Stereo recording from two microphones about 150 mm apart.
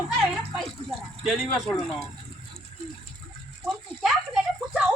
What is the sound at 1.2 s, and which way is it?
Speech, centre (ahead or behind).